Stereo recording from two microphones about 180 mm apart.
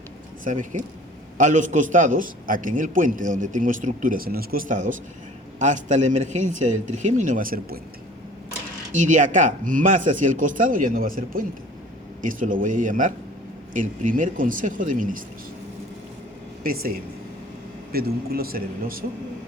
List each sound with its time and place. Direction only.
0.4 s a man's voice: 45° right (ahead or behind)
8.9 s a man's voice: 45° right (ahead or behind)
16.6 s speech: 55° right (ahead or behind)